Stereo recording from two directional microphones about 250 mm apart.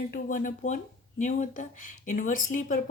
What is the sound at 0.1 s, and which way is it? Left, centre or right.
Speech, left.